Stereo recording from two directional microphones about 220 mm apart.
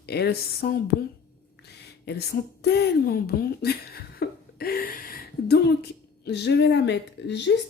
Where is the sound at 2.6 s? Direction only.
45° left (ahead or behind).